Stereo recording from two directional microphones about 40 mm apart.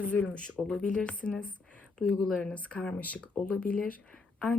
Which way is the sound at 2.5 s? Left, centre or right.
Left.